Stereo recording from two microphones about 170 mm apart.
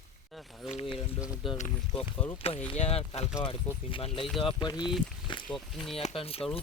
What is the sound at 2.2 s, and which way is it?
Speech, 10° left (ahead or behind).